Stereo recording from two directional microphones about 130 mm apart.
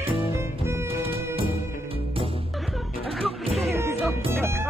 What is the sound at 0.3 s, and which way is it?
Music, 15° right (ahead or behind).